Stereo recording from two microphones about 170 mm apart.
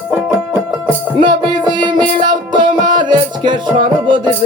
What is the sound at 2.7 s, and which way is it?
Music, 50° right (ahead or behind).